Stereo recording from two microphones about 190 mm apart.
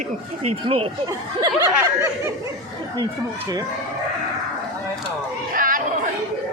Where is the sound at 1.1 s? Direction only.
15° right (ahead or behind).